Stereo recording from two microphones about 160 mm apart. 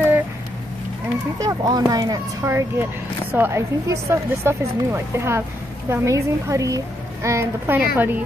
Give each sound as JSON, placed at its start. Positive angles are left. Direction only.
{"t": 1.4, "sound": "a woman's voice", "side_deg": -20}